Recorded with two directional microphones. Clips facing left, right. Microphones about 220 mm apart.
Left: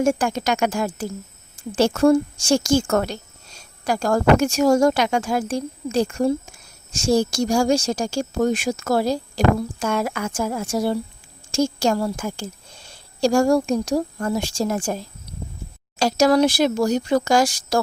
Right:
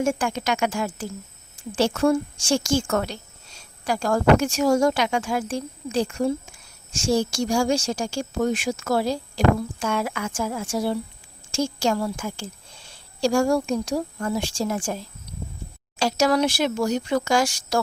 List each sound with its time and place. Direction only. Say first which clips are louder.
0.0 s speech: left 4 dB; 40° left (ahead or behind)
16.0 s speech: left 4 dB; 40° left (ahead or behind)